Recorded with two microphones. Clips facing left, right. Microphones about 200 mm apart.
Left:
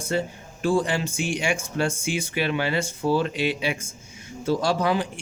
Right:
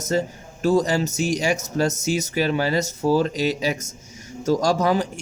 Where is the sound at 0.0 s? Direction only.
40° right (ahead or behind).